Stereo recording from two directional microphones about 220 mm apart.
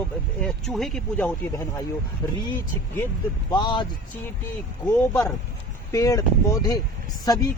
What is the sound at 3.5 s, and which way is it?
Speech, 20° left (ahead or behind).